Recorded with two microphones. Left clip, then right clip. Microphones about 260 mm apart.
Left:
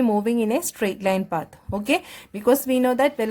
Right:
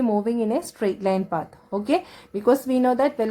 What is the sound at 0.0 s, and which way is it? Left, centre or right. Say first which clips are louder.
Speech: left 1 dB; left.